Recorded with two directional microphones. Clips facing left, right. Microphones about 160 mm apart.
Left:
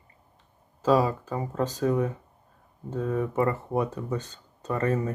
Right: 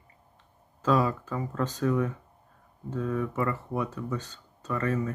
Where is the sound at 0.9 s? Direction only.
35° left (ahead or behind).